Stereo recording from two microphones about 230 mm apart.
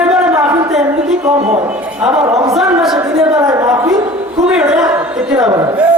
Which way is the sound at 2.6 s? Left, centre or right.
Centre.